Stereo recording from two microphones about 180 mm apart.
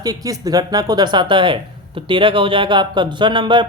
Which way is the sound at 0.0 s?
20° right (ahead or behind).